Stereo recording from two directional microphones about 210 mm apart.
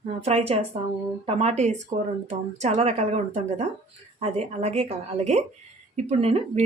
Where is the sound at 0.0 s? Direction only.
30° right (ahead or behind).